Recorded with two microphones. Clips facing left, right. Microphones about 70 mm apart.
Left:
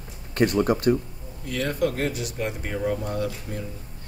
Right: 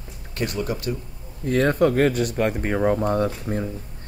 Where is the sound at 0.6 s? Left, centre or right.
Left.